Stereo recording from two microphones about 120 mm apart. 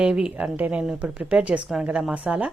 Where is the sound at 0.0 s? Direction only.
5° right (ahead or behind).